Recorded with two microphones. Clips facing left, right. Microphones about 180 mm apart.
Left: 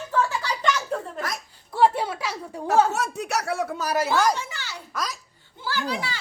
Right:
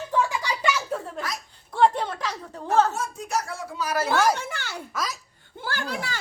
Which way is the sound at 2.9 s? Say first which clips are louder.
Left 2 dB; 75° left (ahead or behind).